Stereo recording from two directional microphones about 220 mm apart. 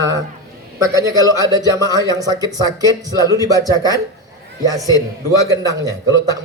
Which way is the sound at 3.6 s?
15° left (ahead or behind).